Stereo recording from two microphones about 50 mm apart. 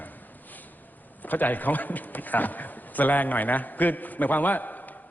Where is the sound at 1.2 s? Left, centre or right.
Left.